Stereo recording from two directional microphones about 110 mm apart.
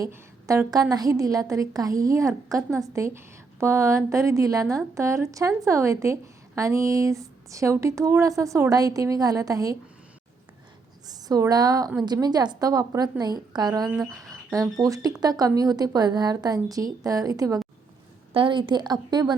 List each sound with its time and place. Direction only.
0.0 s a woman's voice: 30° right (ahead or behind)
11.1 s a woman's voice: 35° right (ahead or behind)
18.3 s a woman's voice: 45° right (ahead or behind)